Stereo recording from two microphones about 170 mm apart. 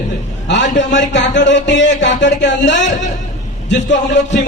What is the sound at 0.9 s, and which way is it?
A man's voice, 90° left.